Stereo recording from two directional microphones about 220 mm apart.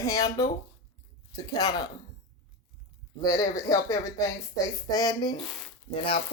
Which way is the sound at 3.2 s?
15° left (ahead or behind).